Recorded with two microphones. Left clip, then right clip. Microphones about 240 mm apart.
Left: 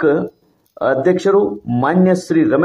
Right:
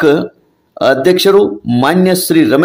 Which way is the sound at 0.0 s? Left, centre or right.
Right.